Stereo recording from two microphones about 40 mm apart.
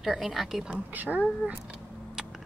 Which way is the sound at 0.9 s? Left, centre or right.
Right.